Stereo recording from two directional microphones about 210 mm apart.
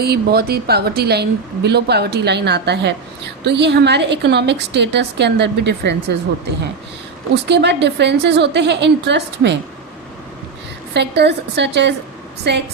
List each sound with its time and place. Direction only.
0.0 s a woman's voice: 50° right (ahead or behind)
7.4 s a woman's voice: 55° right (ahead or behind)
10.9 s a woman's voice: 55° right (ahead or behind)